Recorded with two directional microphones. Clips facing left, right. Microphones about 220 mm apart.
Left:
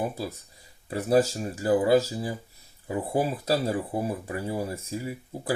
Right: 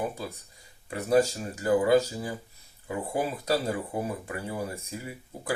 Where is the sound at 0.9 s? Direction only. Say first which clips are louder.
Left 1 dB; 30° left (ahead or behind).